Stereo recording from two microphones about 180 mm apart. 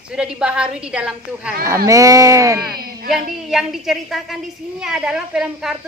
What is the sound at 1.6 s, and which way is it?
Speech, 15° right (ahead or behind).